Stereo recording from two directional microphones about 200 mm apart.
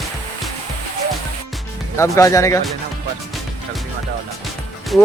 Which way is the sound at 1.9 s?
15° left (ahead or behind).